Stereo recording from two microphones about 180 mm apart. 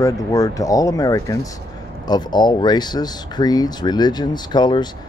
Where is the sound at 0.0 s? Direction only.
20° left (ahead or behind).